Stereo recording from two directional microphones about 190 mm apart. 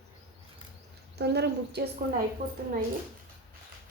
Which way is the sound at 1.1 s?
60° right (ahead or behind).